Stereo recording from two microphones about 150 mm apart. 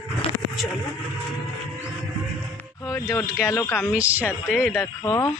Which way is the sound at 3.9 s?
10° right (ahead or behind).